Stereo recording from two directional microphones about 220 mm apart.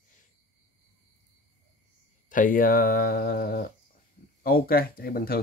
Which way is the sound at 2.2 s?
40° left (ahead or behind).